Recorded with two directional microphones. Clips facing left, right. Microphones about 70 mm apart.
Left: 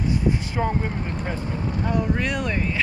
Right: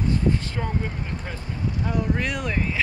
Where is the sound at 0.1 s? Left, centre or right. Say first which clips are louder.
Even; centre.